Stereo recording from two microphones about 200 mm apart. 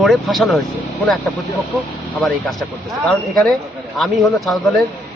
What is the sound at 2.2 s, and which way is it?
Speech, centre (ahead or behind).